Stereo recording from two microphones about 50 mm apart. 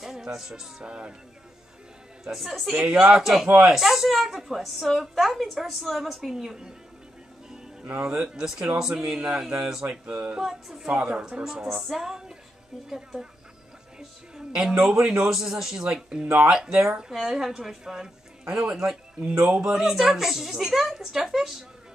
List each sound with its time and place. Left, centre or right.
0.0 s speech: centre
0.8 s speech: centre
2.2 s a woman's voice: centre
7.9 s speech: centre
11.1 s speech: centre
11.6 s music: centre
12.9 s speech: centre
13.9 s music: centre
14.8 s speech: centre